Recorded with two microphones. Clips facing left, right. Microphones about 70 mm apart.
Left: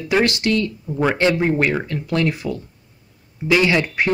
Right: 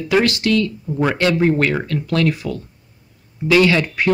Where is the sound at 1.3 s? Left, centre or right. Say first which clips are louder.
Right 2 dB; centre.